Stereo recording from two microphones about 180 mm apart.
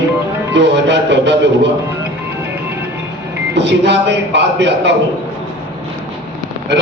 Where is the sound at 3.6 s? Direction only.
75° right (ahead or behind).